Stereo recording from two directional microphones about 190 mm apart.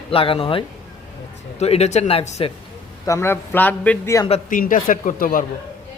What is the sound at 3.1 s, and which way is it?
Speech, 15° left (ahead or behind).